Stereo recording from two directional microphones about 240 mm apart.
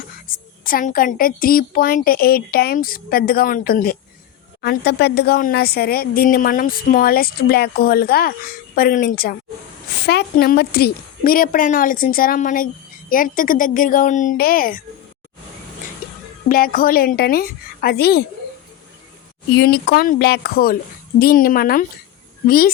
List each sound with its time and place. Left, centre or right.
0.3 s speech: left
16.5 s speech: left
19.5 s speech: left